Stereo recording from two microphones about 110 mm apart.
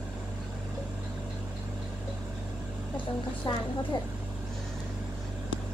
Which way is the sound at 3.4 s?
40° left (ahead or behind).